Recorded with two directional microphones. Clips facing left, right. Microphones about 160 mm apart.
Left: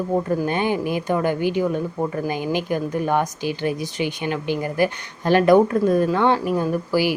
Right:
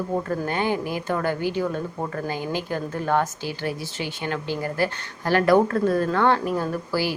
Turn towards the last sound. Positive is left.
turn(degrees=15)  # may be behind; listen again after turning